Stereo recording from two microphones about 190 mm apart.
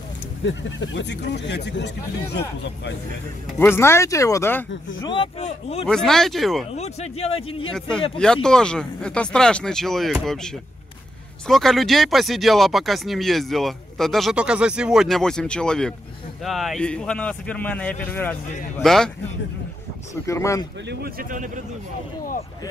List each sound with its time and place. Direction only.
0.4 s speech: 75° left (ahead or behind)
3.5 s speech: 10° left (ahead or behind)
5.0 s speech: 25° left (ahead or behind)
5.9 s speech: 5° left (ahead or behind)
6.7 s speech: 35° left (ahead or behind)
8.2 s speech: 5° left (ahead or behind)
20.2 s speech: 15° left (ahead or behind)
20.9 s speech: 50° right (ahead or behind)